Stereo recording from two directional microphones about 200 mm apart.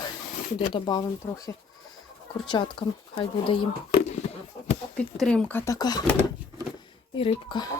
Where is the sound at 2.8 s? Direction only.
20° left (ahead or behind).